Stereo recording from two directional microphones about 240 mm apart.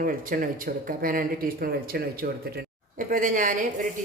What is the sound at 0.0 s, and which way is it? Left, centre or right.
Speech, right.